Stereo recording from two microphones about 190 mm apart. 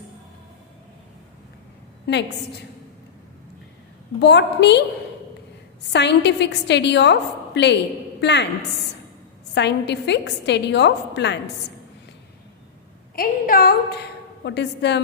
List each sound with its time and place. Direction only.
2.1 s a woman's voice: 65° left (ahead or behind)
4.2 s a woman's voice: 65° left (ahead or behind)
5.9 s a woman's voice: 65° left (ahead or behind)
9.6 s a woman's voice: 65° left (ahead or behind)
13.1 s a woman's voice: 50° left (ahead or behind)